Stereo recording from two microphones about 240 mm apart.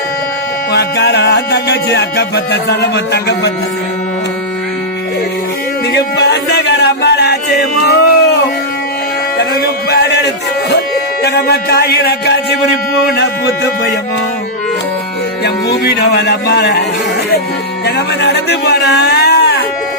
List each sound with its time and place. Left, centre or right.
0.7 s music: left
5.9 s a sound: left
9.9 s a sound: left
11.2 s music: left
15.4 s music: left
17.8 s a man's voice: left